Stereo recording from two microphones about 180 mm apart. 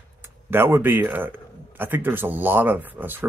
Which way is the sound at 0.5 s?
10° right (ahead or behind).